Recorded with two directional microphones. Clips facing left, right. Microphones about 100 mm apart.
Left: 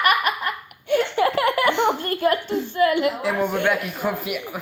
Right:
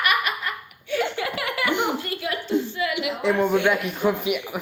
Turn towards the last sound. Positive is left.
turn(degrees=0)  # may be behind; listen again after turning